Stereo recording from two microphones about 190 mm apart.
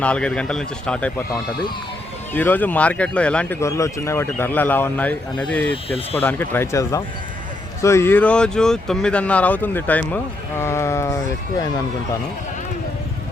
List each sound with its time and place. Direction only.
0.0 s speech: 5° left (ahead or behind)
2.3 s speech: 10° left (ahead or behind)
5.7 s speech: 30° left (ahead or behind)
6.1 s speech: 10° left (ahead or behind)